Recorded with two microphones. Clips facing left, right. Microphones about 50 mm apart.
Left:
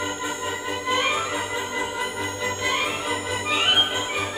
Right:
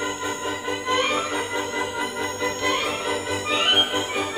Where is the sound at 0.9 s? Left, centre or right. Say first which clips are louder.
Right 1 dB; centre.